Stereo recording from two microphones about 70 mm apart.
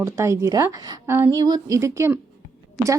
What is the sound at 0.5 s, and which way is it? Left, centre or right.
Speech, right.